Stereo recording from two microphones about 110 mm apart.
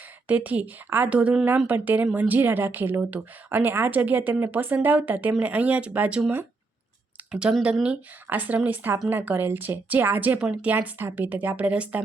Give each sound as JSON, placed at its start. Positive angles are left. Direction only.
{"t": 0.3, "sound": "a woman's voice", "side_deg": -15}